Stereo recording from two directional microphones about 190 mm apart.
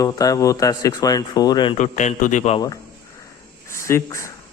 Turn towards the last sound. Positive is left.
turn(degrees=15)  # may be behind; listen again after turning